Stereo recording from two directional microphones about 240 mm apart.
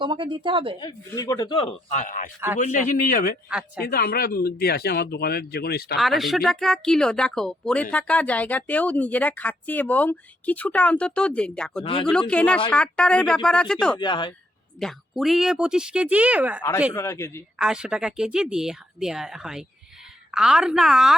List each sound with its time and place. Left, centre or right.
0.0 s speech: centre
0.8 s speech: centre; by 6.0 s left
6.0 s a woman's voice: centre
11.8 s speech: left
12.3 s a woman's voice: centre
14.0 s speech: centre
14.8 s a woman's voice: centre
16.9 s a man's voice: centre
17.6 s a woman's voice: centre